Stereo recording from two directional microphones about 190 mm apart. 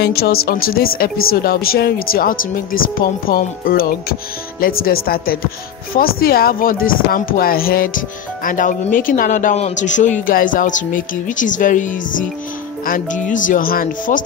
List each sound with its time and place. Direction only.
0.0 s speech: 55° left (ahead or behind)